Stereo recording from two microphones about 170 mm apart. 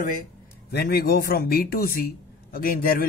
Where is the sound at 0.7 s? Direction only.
70° left (ahead or behind).